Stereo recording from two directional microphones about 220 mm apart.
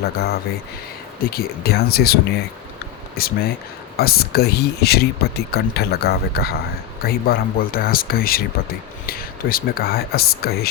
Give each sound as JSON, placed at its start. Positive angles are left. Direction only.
{"t": 0.0, "sound": "speech", "side_deg": 45}
{"t": 3.2, "sound": "speech", "side_deg": 45}